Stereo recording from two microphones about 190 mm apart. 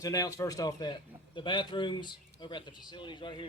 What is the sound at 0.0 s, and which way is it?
A man's voice, 20° left (ahead or behind).